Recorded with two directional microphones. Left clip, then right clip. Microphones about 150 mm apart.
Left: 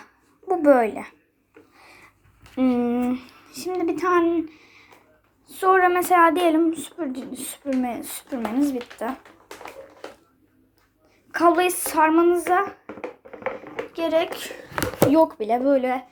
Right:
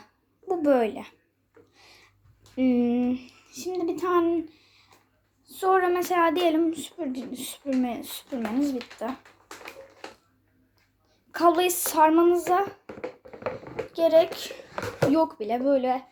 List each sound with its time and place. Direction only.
0.4 s speech: 10° right (ahead or behind)
1.7 s a sound: 15° right (ahead or behind)
2.6 s a child's voice: 15° right (ahead or behind); by 6.1 s centre (ahead or behind)
6.1 s a child's voice: 15° right (ahead or behind); by 9.2 s 10° left (ahead or behind)
11.3 s a child's voice: 10° right (ahead or behind)
13.9 s speech: 15° right (ahead or behind)
15.1 s speech: 5° right (ahead or behind)